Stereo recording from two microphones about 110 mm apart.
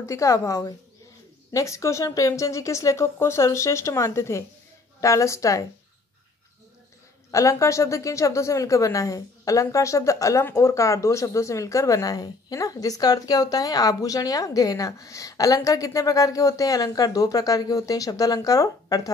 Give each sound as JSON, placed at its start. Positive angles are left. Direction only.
{"t": 0.0, "sound": "speech", "side_deg": 30}
{"t": 7.2, "sound": "speech", "side_deg": 30}